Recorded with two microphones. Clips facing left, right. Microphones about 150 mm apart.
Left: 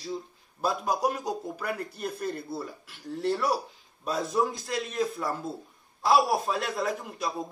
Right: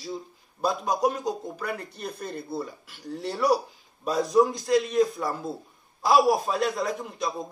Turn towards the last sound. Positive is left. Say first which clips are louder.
# right 1 dB
turn(degrees=5)  # may be behind; listen again after turning